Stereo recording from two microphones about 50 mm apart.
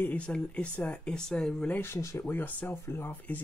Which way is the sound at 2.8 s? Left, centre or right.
Left.